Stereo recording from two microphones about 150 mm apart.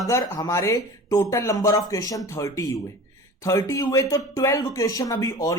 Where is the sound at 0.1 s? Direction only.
20° left (ahead or behind).